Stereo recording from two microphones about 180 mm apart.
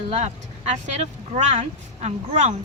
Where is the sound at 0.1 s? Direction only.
35° right (ahead or behind).